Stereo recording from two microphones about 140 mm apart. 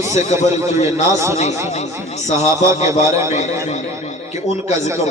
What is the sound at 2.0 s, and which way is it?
Speech, 55° left (ahead or behind).